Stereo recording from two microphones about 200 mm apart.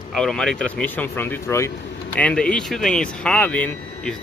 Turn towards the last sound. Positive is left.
turn(degrees=5)  # may be behind; listen again after turning